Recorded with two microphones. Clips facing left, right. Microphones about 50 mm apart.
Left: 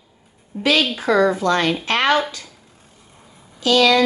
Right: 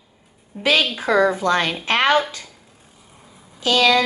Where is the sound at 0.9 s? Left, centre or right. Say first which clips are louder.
Left 1 dB; centre.